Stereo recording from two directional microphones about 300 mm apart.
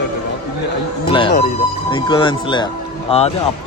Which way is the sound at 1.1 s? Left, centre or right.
Centre.